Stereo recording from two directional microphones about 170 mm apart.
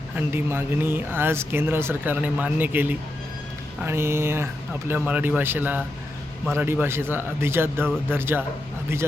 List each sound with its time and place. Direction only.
0.3 s speech: 10° right (ahead or behind)